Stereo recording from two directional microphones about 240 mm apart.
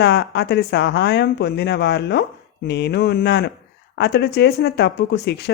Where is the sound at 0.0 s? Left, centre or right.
Left.